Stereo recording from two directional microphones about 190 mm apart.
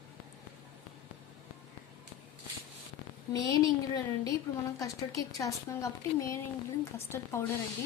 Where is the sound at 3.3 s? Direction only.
20° left (ahead or behind).